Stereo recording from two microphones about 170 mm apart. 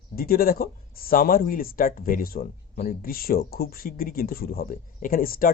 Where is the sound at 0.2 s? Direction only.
60° left (ahead or behind).